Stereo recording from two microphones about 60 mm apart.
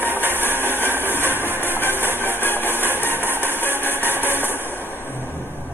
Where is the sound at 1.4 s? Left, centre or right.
Right.